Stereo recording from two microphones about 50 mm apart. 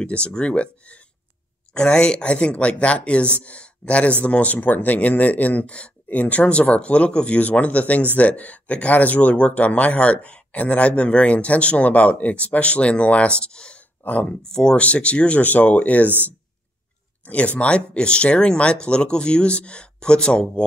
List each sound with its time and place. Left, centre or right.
0.0 s speech: left
14.2 s speech: centre
14.8 s speech: left
17.2 s speech: left